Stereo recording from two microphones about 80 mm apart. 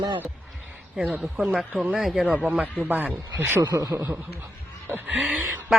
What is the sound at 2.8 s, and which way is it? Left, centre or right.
Speech, right.